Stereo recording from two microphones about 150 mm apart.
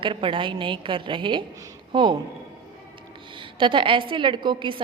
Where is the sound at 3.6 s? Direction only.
35° right (ahead or behind).